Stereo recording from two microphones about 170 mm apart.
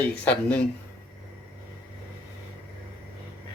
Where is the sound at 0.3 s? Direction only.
5° left (ahead or behind).